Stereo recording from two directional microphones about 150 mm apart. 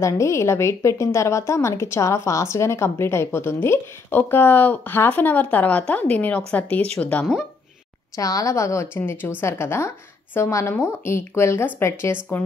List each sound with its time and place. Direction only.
0.0 s a woman's voice: 20° left (ahead or behind)
8.2 s a woman's voice: 25° left (ahead or behind)